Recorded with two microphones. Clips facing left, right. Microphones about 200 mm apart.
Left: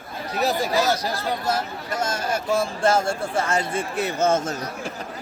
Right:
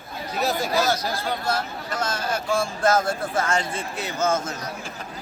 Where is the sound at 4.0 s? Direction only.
55° left (ahead or behind).